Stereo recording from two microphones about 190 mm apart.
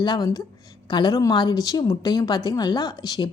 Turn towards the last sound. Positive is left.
turn(degrees=20)  # may be behind; listen again after turning